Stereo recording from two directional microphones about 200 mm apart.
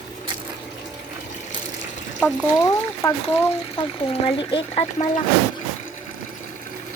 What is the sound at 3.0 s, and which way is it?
Speech, 15° left (ahead or behind).